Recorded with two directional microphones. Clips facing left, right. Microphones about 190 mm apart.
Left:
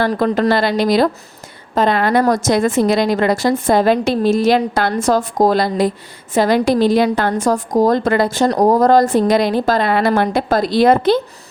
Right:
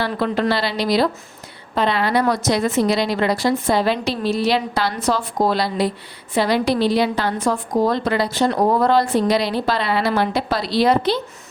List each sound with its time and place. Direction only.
0.0 s a woman's voice: 45° left (ahead or behind)